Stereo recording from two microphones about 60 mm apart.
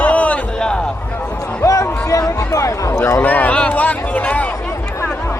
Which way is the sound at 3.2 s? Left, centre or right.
Left.